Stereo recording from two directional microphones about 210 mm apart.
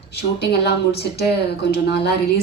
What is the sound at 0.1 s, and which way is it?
Speech, 50° left (ahead or behind).